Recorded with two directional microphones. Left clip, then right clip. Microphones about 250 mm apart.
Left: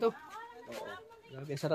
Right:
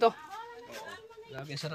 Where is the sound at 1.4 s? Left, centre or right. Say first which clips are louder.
Left 4 dB; left.